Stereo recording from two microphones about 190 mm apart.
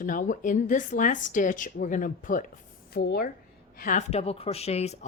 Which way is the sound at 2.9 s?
55° left (ahead or behind).